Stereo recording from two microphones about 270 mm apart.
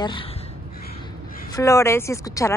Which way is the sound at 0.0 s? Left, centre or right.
Centre.